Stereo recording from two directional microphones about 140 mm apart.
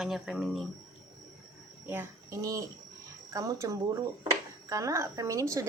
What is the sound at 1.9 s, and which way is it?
A child's voice, 20° right (ahead or behind).